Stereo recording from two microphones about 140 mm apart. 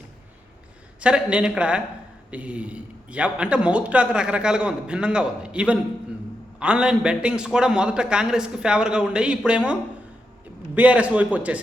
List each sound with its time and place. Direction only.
0.9 s a man's voice: 5° right (ahead or behind)
10.8 s a man's voice: 10° right (ahead or behind)